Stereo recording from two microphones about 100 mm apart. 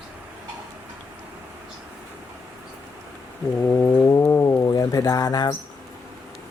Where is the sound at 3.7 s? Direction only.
20° left (ahead or behind).